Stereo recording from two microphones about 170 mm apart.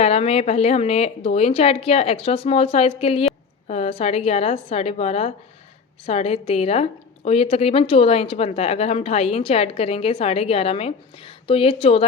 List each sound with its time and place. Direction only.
0.0 s speech: 35° left (ahead or behind)